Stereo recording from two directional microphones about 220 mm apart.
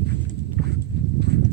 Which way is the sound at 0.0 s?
50° right (ahead or behind).